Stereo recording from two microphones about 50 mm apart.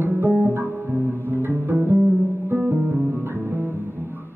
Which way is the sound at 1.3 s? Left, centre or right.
Right.